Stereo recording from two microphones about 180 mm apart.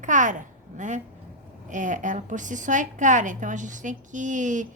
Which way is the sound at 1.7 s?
45° right (ahead or behind).